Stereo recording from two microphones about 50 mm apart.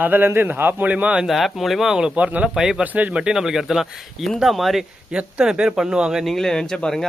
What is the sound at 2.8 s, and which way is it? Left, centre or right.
Speech, right.